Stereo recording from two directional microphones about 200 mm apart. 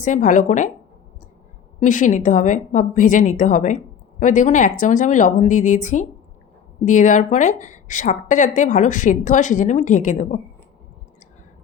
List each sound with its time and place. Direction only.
0.0 s a woman's voice: 40° left (ahead or behind)
1.8 s a woman's voice: 40° left (ahead or behind)